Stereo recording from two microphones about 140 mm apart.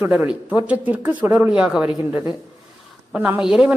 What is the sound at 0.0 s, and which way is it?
Speech, 10° right (ahead or behind).